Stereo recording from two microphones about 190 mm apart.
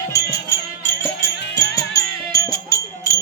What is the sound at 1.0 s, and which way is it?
Music, 15° left (ahead or behind).